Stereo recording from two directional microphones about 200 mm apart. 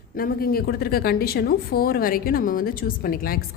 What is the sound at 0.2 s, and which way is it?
A woman's voice, 50° left (ahead or behind).